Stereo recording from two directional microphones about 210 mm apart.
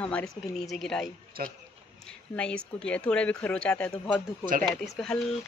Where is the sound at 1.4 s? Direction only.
45° right (ahead or behind).